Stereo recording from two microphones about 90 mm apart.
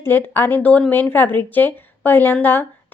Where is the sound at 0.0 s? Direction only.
20° left (ahead or behind).